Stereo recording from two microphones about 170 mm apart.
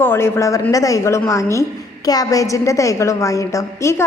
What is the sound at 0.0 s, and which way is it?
A woman's voice, 15° left (ahead or behind).